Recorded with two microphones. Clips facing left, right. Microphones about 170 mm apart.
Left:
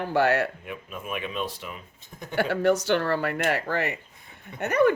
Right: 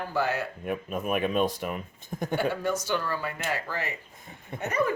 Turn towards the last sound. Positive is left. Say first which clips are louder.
# left 6 dB
turn(degrees=70)  # may be behind; listen again after turning